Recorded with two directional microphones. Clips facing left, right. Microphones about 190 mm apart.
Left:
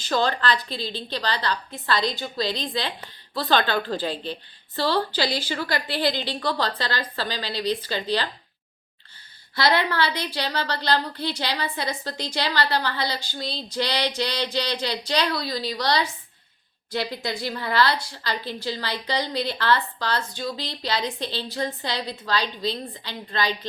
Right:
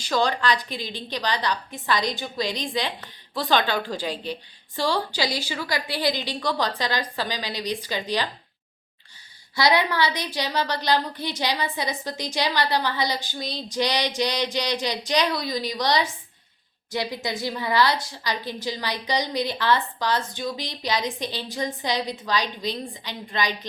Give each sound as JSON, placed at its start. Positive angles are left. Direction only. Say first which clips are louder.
{"t": 0.0, "sound": "a woman's voice", "louder": "even", "side_deg": -15}
{"t": 9.6, "sound": "a woman's voice", "louder": "right 1 dB", "side_deg": -15}